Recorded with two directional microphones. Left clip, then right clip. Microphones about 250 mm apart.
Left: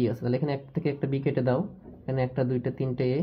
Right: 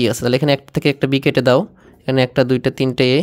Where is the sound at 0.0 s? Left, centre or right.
Right.